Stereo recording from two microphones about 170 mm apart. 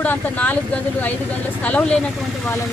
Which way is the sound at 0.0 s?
10° left (ahead or behind).